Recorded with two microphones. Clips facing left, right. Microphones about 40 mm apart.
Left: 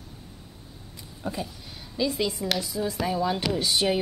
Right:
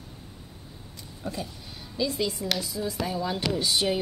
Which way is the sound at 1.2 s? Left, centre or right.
Centre.